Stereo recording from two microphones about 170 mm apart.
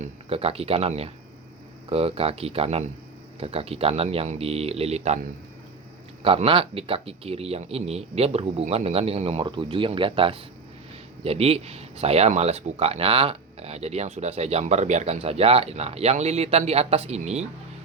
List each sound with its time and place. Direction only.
0.0 s speech: 35° right (ahead or behind)
6.2 s speech: 35° right (ahead or behind)